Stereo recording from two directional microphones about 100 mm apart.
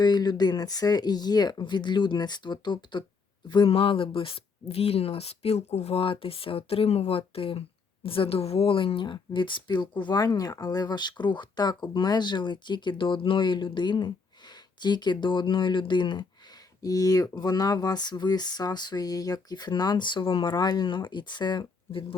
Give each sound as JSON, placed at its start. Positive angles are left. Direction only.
{"t": 0.0, "sound": "speech", "side_deg": 45}
{"t": 3.7, "sound": "speech", "side_deg": 65}
{"t": 10.2, "sound": "speech", "side_deg": 40}
{"t": 16.8, "sound": "speech", "side_deg": 35}